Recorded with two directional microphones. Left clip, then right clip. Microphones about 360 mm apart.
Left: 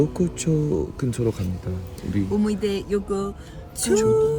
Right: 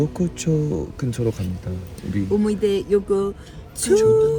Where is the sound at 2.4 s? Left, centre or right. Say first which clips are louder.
Right 4 dB; centre.